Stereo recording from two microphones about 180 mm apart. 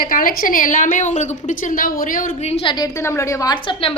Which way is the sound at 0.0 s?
50° left (ahead or behind).